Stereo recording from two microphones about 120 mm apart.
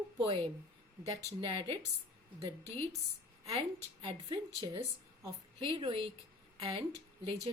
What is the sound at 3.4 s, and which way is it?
Speech, 50° right (ahead or behind).